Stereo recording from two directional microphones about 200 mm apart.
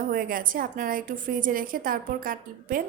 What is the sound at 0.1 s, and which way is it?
A woman's voice, 45° right (ahead or behind).